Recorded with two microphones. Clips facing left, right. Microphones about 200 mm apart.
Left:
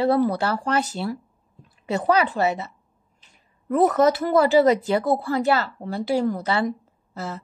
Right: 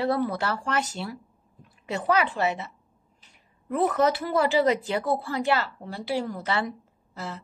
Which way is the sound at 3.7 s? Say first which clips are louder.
Left 5 dB; 40° left (ahead or behind).